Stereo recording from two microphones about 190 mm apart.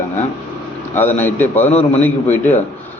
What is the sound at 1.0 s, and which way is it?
A man's voice, 10° left (ahead or behind).